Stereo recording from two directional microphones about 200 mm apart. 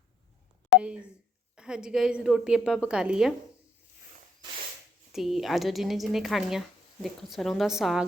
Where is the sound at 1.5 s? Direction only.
5° right (ahead or behind).